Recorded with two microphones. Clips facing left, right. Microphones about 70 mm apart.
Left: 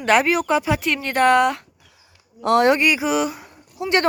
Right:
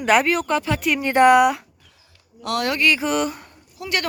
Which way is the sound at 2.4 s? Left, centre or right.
Left.